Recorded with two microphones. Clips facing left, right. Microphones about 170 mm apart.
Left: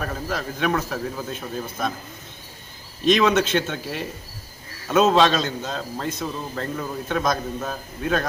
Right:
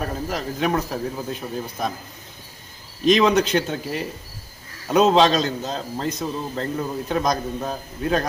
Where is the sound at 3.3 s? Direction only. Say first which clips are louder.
Right 1 dB; 40° right (ahead or behind).